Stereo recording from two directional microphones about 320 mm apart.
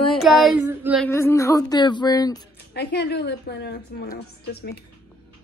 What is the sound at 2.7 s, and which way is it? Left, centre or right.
A woman's voice, left.